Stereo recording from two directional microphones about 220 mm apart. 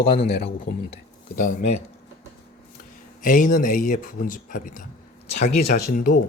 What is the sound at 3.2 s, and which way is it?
Speech, 40° left (ahead or behind).